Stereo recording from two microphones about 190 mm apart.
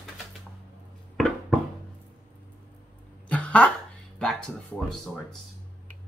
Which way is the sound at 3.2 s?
5° left (ahead or behind).